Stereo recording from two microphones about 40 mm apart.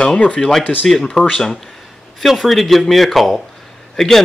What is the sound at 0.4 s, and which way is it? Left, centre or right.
Speech, centre.